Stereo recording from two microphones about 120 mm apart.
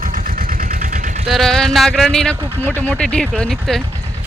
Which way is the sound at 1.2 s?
Centre (ahead or behind).